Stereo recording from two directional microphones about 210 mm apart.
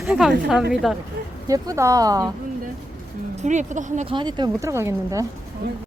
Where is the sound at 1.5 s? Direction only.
15° right (ahead or behind).